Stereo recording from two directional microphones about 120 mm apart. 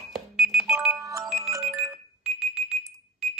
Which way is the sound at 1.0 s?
25° right (ahead or behind).